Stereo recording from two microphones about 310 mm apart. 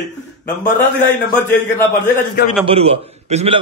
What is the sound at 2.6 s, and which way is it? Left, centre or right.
Speech, centre.